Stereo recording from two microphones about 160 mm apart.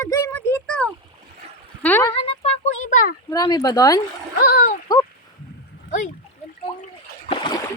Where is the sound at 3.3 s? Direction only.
25° left (ahead or behind).